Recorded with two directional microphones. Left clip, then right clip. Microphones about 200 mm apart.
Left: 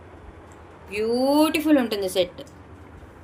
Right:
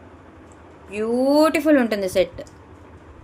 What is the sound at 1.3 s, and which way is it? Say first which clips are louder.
Speech: right 5 dB; 40° right (ahead or behind).